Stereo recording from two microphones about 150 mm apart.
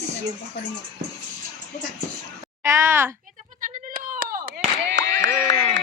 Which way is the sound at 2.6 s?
15° right (ahead or behind).